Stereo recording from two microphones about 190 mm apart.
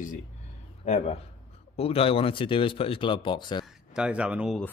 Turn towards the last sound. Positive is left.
turn(degrees=-5)  # may be behind; listen again after turning